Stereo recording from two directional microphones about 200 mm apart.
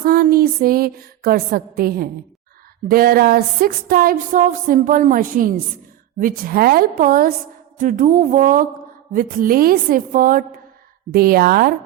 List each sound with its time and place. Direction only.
0.0 s a sound: 45° right (ahead or behind)
2.9 s music: 50° right (ahead or behind)
7.8 s speech: 40° right (ahead or behind)
9.1 s music: 45° right (ahead or behind)